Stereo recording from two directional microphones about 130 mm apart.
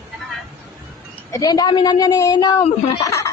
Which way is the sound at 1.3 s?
30° left (ahead or behind).